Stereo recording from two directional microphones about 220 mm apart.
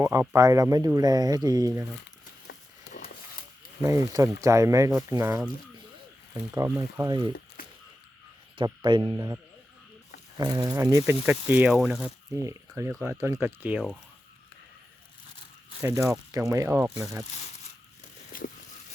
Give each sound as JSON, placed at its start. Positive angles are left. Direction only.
{"t": 0.0, "sound": "speech", "side_deg": -15}
{"t": 3.8, "sound": "speech", "side_deg": -15}
{"t": 6.5, "sound": "speech", "side_deg": -15}
{"t": 8.5, "sound": "speech", "side_deg": -20}
{"t": 15.8, "sound": "speech", "side_deg": -15}
{"t": 18.3, "sound": "a sound", "side_deg": 40}